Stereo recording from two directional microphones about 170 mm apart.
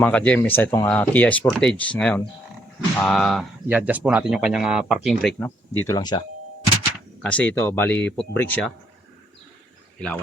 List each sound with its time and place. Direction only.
0.0 s speech: 5° left (ahead or behind)
3.7 s speech: 10° right (ahead or behind)
5.4 s speech: 15° left (ahead or behind)
7.2 s speech: 10° left (ahead or behind)